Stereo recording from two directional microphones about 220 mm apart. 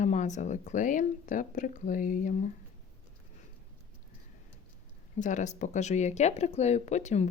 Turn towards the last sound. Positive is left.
turn(degrees=30)  # may be behind; listen again after turning